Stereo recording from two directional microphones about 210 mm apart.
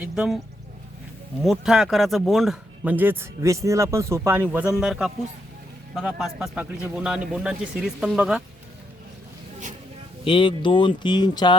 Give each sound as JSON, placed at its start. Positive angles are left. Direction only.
{"t": 0.0, "sound": "speech", "side_deg": -5}
{"t": 1.4, "sound": "speech", "side_deg": 0}
{"t": 10.2, "sound": "speech", "side_deg": 25}